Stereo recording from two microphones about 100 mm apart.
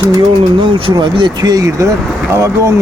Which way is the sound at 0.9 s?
55° right (ahead or behind).